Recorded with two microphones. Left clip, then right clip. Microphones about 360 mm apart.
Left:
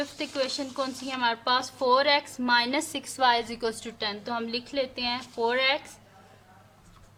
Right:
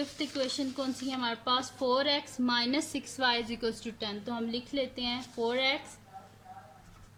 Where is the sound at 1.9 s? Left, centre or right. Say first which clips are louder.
Left 7 dB; left.